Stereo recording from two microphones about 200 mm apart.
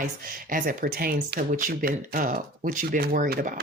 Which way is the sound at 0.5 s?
45° right (ahead or behind).